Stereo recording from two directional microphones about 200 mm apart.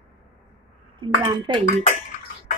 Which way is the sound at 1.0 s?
25° right (ahead or behind).